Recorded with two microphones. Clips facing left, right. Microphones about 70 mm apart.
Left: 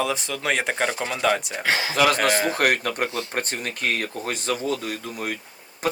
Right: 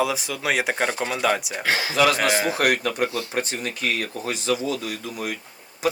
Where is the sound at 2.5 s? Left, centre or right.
Left.